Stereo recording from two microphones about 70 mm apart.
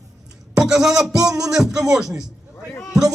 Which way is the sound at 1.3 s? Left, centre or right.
Centre.